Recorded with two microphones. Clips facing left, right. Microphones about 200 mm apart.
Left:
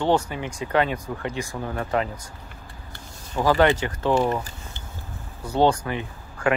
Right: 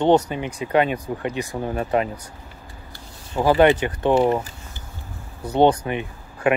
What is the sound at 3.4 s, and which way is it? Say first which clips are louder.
Speech: right 3 dB; 15° right (ahead or behind).